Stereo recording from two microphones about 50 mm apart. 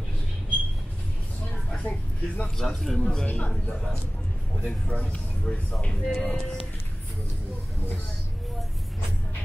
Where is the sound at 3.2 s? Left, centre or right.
Left.